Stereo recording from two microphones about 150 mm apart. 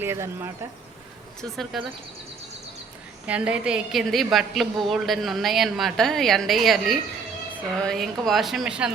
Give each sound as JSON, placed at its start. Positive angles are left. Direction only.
{"t": 0.0, "sound": "speech", "side_deg": -15}
{"t": 1.4, "sound": "a woman's voice", "side_deg": 0}
{"t": 3.2, "sound": "a woman's voice", "side_deg": -10}